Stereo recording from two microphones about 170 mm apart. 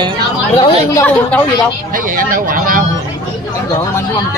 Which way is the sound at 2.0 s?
55° right (ahead or behind).